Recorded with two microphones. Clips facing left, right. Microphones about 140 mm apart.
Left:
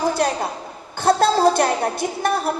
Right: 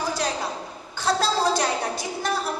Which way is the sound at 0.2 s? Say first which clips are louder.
Left 6 dB; 55° left (ahead or behind).